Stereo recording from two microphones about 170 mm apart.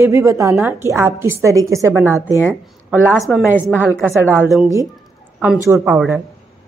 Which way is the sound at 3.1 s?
Centre (ahead or behind).